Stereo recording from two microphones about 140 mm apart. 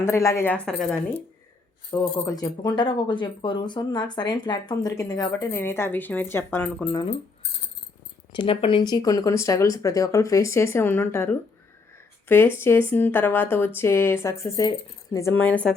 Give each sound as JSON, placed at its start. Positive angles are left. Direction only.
{"t": 0.0, "sound": "speech", "side_deg": 20}
{"t": 1.9, "sound": "speech", "side_deg": 15}
{"t": 2.3, "sound": "speech", "side_deg": 25}
{"t": 8.3, "sound": "speech", "side_deg": 35}
{"t": 15.3, "sound": "speech", "side_deg": 10}